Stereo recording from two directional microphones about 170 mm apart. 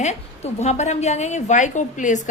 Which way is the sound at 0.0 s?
40° left (ahead or behind).